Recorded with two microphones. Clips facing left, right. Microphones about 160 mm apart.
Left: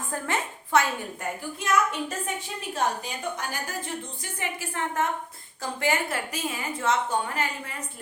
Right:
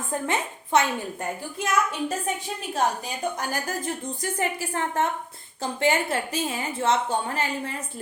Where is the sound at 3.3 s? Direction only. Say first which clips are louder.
Right 4 dB; 45° right (ahead or behind).